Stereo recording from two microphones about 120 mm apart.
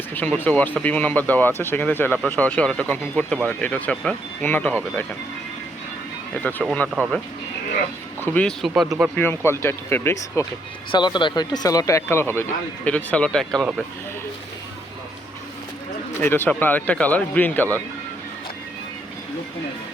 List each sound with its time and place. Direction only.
0.1 s speech: 15° left (ahead or behind)
6.3 s speech: 10° left (ahead or behind)
8.3 s speech: 10° left (ahead or behind)
8.6 s speech: centre (ahead or behind)
9.1 s speech: 20° left (ahead or behind)
10.9 s speech: 40° left (ahead or behind); by 13.8 s centre (ahead or behind)
16.2 s speech: 20° left (ahead or behind)